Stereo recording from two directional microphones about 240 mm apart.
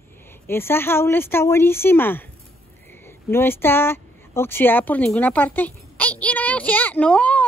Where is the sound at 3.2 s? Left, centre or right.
Centre.